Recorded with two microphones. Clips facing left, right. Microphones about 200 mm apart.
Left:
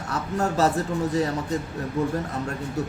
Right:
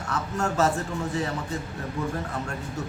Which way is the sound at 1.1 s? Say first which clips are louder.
Left 5 dB; 40° left (ahead or behind).